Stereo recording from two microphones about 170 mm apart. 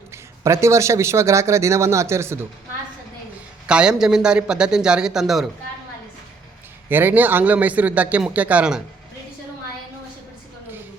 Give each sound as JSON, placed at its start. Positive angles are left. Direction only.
{"t": 0.1, "sound": "speech", "side_deg": -15}
{"t": 3.7, "sound": "a man's voice", "side_deg": -5}
{"t": 6.8, "sound": "speech", "side_deg": -10}